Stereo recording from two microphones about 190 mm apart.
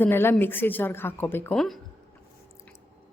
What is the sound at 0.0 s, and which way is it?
Speech, 10° left (ahead or behind).